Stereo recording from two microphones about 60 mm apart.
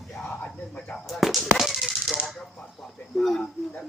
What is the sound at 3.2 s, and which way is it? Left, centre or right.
Speech, centre.